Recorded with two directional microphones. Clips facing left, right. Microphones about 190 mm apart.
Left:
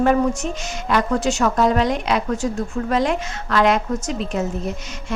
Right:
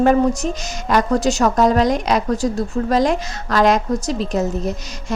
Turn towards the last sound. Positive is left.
turn(degrees=-40)  # may be behind; listen again after turning